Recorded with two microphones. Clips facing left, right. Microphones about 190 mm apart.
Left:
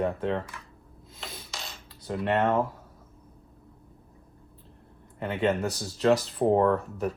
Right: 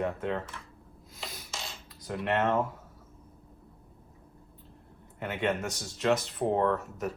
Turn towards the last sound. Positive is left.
turn(degrees=35)  # may be behind; listen again after turning